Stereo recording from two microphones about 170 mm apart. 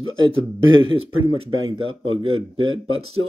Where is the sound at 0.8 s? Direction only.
30° right (ahead or behind).